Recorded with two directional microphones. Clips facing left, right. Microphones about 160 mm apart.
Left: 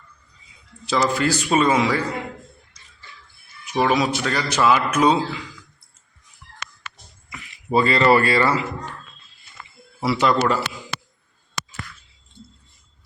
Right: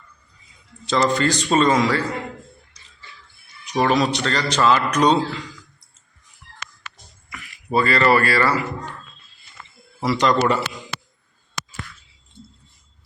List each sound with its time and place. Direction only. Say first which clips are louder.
0.9 s a man's voice: right 1 dB; 5° left (ahead or behind)
3.7 s a man's voice: right 1 dB; 5° left (ahead or behind)
7.3 s speech: left 2 dB; 20° left (ahead or behind)
10.0 s a man's voice: right 1 dB; 10° left (ahead or behind)